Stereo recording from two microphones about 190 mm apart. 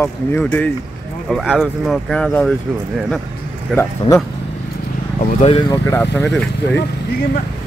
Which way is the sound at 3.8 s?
15° left (ahead or behind).